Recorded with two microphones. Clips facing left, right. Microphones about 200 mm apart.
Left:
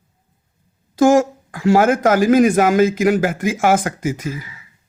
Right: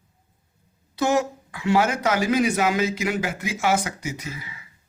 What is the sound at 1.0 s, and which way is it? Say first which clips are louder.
Speech: left 9 dB; 45° left (ahead or behind).